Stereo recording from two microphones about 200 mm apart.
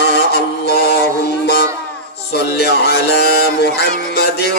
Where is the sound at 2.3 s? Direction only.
55° left (ahead or behind).